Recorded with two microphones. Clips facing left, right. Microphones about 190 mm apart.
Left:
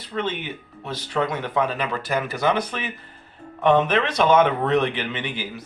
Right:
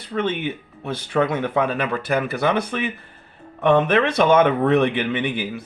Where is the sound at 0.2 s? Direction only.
55° right (ahead or behind).